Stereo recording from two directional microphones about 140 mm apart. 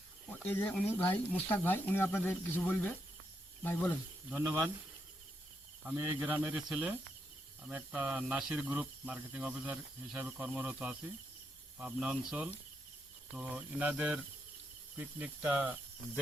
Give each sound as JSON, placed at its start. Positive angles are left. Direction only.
{"t": 0.4, "sound": "speech", "side_deg": 15}
{"t": 4.3, "sound": "speech", "side_deg": -5}
{"t": 5.8, "sound": "speech", "side_deg": -10}